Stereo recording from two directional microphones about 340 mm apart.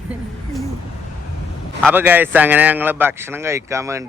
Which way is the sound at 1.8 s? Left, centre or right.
Centre.